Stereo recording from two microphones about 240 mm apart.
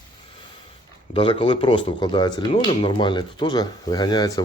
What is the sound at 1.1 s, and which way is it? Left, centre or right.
Speech, left.